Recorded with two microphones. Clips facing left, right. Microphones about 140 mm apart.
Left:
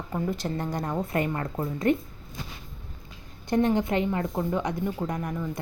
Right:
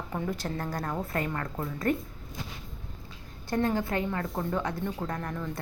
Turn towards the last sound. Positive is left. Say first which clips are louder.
# left 3 dB
turn(degrees=10)  # may be behind; listen again after turning